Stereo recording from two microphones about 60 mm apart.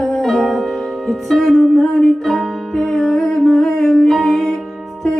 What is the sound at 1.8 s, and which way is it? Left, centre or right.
Music, centre.